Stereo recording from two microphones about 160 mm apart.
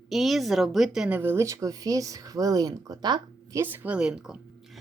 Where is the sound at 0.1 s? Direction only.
Centre (ahead or behind); by 3.6 s 25° right (ahead or behind).